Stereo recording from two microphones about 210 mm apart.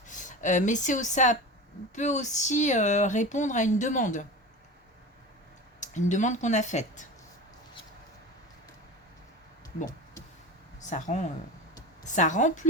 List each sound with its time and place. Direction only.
0.1 s speech: 35° left (ahead or behind)
5.8 s speech: 35° left (ahead or behind)
10.8 s speech: 35° left (ahead or behind)